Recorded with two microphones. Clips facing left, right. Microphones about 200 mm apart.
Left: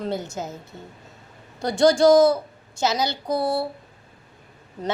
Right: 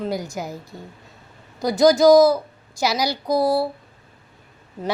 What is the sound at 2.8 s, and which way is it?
Speech, 10° right (ahead or behind).